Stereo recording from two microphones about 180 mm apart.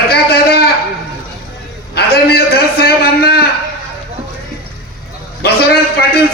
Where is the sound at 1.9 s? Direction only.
60° left (ahead or behind).